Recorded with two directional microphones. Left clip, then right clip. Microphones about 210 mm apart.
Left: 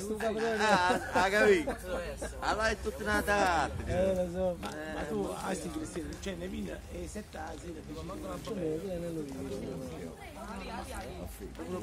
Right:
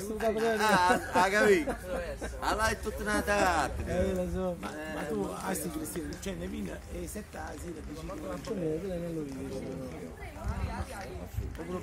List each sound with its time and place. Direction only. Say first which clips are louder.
0.2 s speech: right 3 dB; 55° right (ahead or behind)